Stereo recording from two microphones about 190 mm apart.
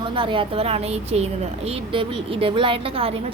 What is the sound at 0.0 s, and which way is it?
A woman's voice, 25° right (ahead or behind).